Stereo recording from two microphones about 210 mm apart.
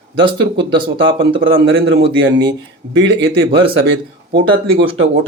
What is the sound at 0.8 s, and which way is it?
Speech, 55° right (ahead or behind).